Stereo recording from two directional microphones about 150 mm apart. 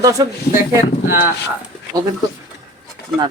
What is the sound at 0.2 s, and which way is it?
Speech, 25° right (ahead or behind).